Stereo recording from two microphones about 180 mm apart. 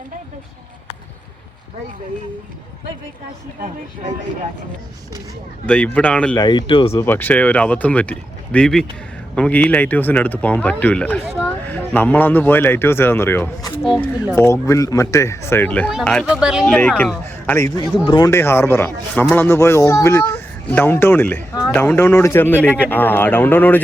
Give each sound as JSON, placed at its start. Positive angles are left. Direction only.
{"t": 5.6, "sound": "speech", "side_deg": 10}
{"t": 6.4, "sound": "speech", "side_deg": 25}
{"t": 6.9, "sound": "speech", "side_deg": 10}
{"t": 13.8, "sound": "speech", "side_deg": 0}
{"t": 14.3, "sound": "speech", "side_deg": 15}
{"t": 16.6, "sound": "a man's voice", "side_deg": 5}